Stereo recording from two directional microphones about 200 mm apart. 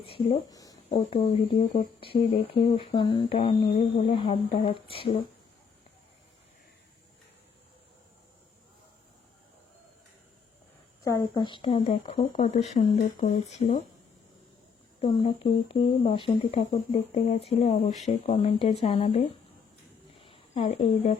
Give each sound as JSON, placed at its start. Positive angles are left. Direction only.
{"t": 0.0, "sound": "speech", "side_deg": 30}
{"t": 11.0, "sound": "speech", "side_deg": 15}
{"t": 15.0, "sound": "speech", "side_deg": 30}
{"t": 20.1, "sound": "a sound", "side_deg": 25}